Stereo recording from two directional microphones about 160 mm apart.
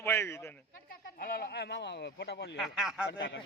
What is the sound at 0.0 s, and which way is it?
Speech, 15° left (ahead or behind).